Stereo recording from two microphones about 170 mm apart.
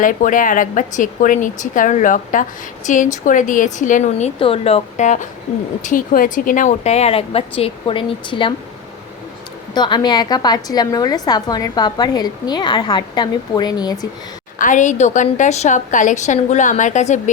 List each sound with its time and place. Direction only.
0.0 s a woman's voice: 50° left (ahead or behind); by 8.5 s 30° left (ahead or behind)
9.7 s a woman's voice: 25° left (ahead or behind)
14.6 s a woman's voice: 45° left (ahead or behind)